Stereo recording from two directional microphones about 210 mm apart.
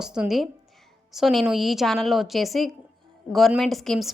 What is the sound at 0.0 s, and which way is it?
A woman's voice, 5° right (ahead or behind).